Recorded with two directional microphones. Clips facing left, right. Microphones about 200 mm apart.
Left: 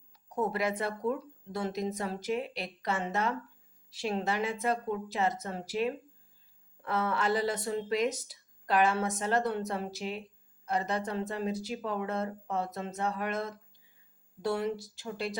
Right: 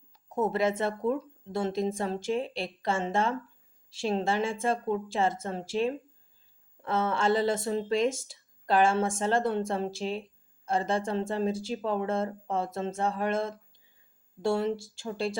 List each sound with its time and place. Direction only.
0.1 s speech: 25° right (ahead or behind)